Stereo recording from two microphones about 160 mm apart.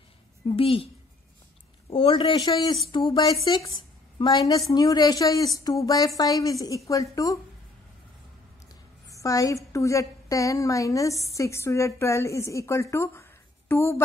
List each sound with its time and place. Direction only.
0.5 s speech: 35° left (ahead or behind)
1.9 s a woman's voice: 35° left (ahead or behind)
9.1 s a woman's voice: 20° left (ahead or behind)